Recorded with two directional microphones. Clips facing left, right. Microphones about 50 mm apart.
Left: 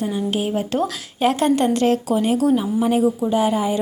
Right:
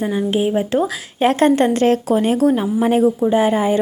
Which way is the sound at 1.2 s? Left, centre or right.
Right.